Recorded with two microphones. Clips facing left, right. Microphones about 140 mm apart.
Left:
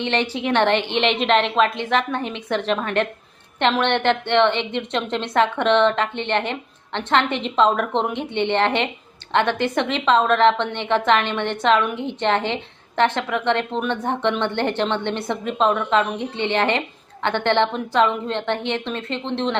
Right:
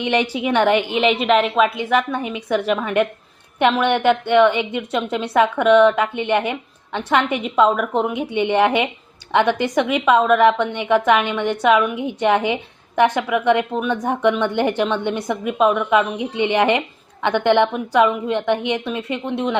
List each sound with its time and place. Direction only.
0.0 s a woman's voice: 10° right (ahead or behind)